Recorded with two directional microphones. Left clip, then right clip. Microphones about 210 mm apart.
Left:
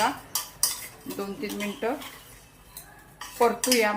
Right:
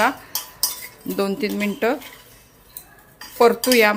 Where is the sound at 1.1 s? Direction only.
55° right (ahead or behind).